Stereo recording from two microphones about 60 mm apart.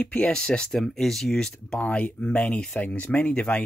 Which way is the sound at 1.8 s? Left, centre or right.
Left.